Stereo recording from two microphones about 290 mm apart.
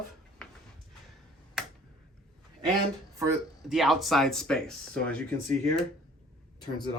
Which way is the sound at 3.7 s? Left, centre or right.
Centre.